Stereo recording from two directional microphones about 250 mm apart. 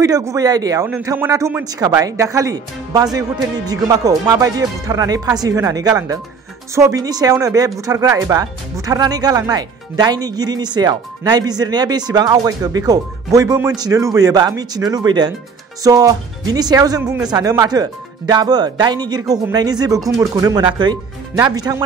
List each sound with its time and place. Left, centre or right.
0.0 s speech: centre